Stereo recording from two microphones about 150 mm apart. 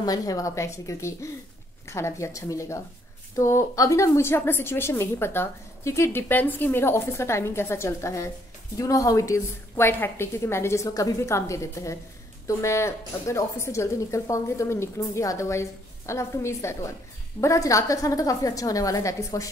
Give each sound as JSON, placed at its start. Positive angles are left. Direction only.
{"t": 0.0, "sound": "a woman's voice", "side_deg": 25}